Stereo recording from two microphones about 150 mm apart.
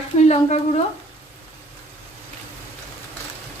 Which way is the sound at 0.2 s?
50° left (ahead or behind).